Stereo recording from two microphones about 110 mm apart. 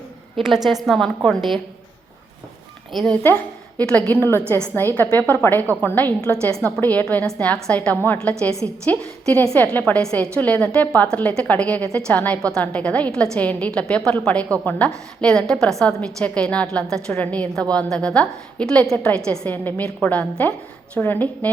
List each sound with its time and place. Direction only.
0.3 s a woman's voice: centre (ahead or behind)
2.9 s a woman's voice: centre (ahead or behind); by 21.5 s 15° left (ahead or behind)